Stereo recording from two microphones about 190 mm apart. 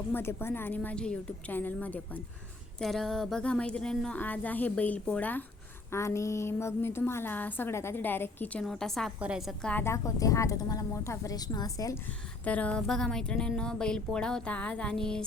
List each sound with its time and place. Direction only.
0.1 s a woman's voice: 10° left (ahead or behind)
9.6 s a woman's voice: 10° left (ahead or behind)
12.5 s speech: 5° left (ahead or behind)